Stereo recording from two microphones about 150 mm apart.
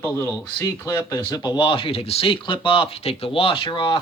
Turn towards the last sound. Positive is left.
turn(degrees=35)  # may be behind; listen again after turning